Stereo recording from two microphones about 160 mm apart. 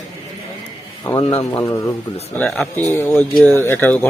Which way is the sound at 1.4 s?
20° left (ahead or behind).